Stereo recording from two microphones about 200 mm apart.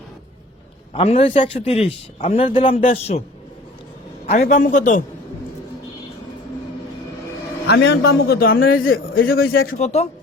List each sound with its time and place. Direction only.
0.9 s a man's voice: 30° left (ahead or behind)
4.3 s a man's voice: 35° left (ahead or behind)
7.7 s a man's voice: 55° left (ahead or behind)
9.7 s a man's voice: 35° left (ahead or behind)